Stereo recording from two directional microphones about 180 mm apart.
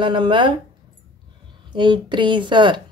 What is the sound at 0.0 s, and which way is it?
Speech, 25° right (ahead or behind).